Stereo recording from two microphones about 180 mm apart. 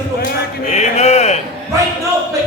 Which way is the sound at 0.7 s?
40° left (ahead or behind).